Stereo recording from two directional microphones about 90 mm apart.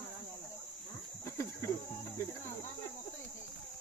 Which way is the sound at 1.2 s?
30° left (ahead or behind).